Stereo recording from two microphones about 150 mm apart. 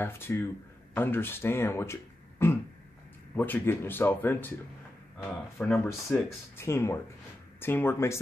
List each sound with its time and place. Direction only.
0.0 s speech: 15° left (ahead or behind)
5.6 s speech: 5° left (ahead or behind)
6.5 s speech: 15° left (ahead or behind)